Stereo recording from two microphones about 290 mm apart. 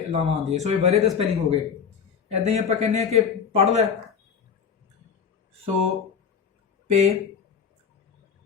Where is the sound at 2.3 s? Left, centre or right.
Right.